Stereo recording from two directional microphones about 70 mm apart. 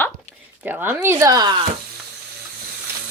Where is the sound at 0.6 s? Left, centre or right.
Right.